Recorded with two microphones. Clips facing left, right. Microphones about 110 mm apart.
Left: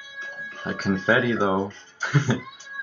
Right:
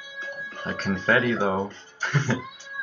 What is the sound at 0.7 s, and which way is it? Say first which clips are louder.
Speech: left 2 dB; 10° left (ahead or behind).